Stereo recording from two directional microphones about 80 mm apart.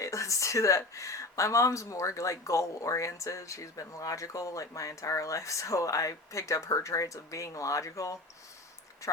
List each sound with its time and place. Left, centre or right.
0.0 s speech: left